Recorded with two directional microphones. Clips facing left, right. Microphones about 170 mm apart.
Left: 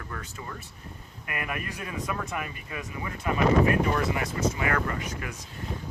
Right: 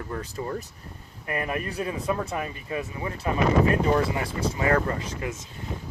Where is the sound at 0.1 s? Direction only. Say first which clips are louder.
Right 10 dB; 35° right (ahead or behind).